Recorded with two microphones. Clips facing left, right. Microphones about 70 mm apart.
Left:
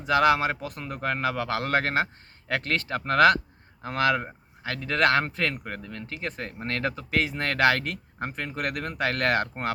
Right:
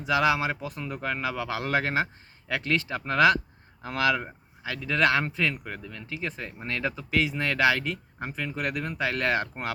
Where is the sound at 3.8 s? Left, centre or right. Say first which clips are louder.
Left 1 dB; left.